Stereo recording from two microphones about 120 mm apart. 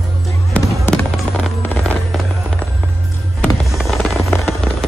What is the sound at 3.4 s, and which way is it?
Fireworks, centre (ahead or behind).